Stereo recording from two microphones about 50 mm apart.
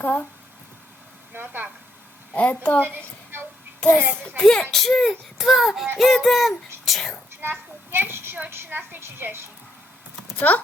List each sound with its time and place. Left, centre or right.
0.0 s speech: left
1.3 s speech: right
2.3 s a woman's voice: left
2.8 s a woman's voice: right
4.4 s a child's voice: centre
7.4 s a woman's voice: right
10.5 s speech: left